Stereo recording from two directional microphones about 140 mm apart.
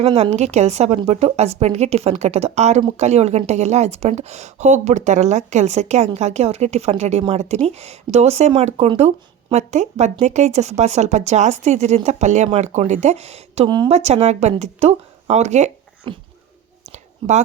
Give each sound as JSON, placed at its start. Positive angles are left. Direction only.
{"t": 0.0, "sound": "a woman's voice", "side_deg": -50}
{"t": 13.7, "sound": "speech", "side_deg": -30}
{"t": 13.9, "sound": "a woman's voice", "side_deg": -50}
{"t": 16.1, "sound": "speech", "side_deg": -35}
{"t": 16.9, "sound": "a sound", "side_deg": -55}